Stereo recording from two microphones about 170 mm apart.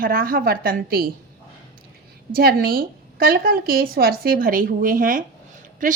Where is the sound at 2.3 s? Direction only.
60° right (ahead or behind).